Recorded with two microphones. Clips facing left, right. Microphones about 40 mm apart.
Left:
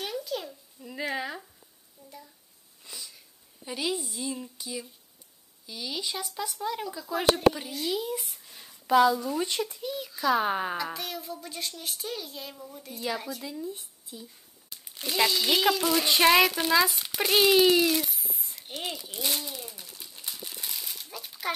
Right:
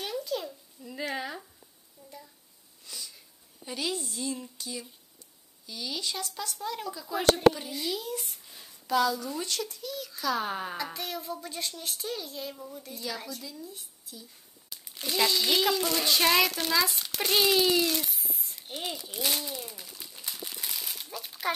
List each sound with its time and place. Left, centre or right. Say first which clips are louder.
0.0 s a sound: even; centre
2.8 s wheeze: even; centre
3.6 s speech: left 2 dB; centre
8.8 s a child's voice: left 5 dB; centre
10.8 s speech: left 1 dB; centre
13.0 s speech: left 5 dB; centre
13.4 s speech: left 6 dB; left
15.1 s speech: left 1 dB; centre
16.1 s speech: left 4 dB; centre
18.3 s a sound: even; centre
18.8 s crumpling: even; centre
21.1 s a sound: right 1 dB; centre